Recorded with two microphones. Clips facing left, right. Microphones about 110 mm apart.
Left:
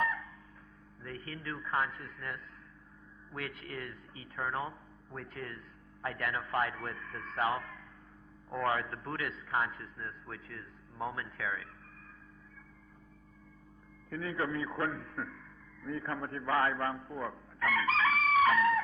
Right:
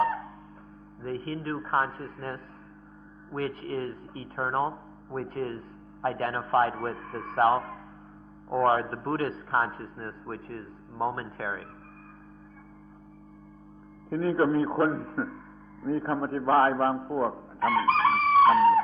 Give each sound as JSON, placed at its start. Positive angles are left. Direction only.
{"t": 0.0, "sound": "music", "side_deg": -40}
{"t": 1.0, "sound": "speech", "side_deg": -40}
{"t": 14.1, "sound": "speech", "side_deg": -40}